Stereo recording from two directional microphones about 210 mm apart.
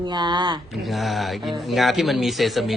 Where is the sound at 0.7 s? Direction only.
Centre (ahead or behind).